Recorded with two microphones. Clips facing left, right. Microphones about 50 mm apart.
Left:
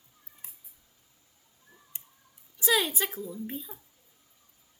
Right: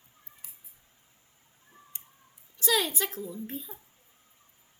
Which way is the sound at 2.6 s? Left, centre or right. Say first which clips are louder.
Left 1 dB; centre.